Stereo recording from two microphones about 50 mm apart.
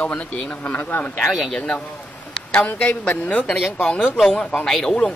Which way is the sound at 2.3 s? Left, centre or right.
Centre.